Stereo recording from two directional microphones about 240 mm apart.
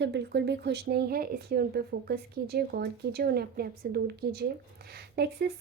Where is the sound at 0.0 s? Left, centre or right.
Right.